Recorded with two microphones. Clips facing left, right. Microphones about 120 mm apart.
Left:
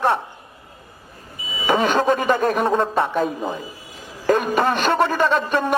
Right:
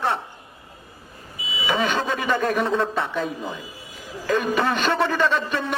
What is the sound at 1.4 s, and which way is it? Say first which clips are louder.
A man's voice: left 4 dB; 45° left (ahead or behind).